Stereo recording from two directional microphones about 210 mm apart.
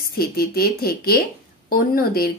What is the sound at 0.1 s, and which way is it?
Speech, 45° left (ahead or behind).